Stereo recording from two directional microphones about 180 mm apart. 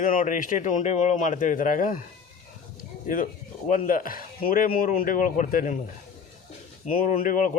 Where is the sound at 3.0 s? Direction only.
50° left (ahead or behind).